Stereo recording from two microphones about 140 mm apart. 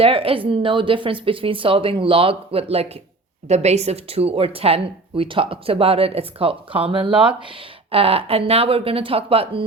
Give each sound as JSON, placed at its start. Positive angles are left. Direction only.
{"t": 0.0, "sound": "speech", "side_deg": -40}